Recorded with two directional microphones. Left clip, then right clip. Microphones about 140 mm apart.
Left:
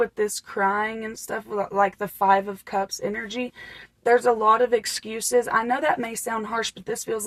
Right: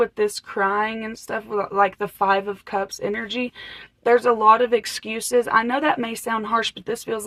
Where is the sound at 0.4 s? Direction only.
35° right (ahead or behind).